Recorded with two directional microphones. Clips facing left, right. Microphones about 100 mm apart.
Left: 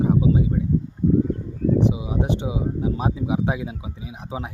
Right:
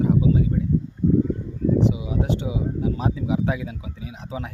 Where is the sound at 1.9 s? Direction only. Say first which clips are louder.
Left 1 dB; 25° left (ahead or behind).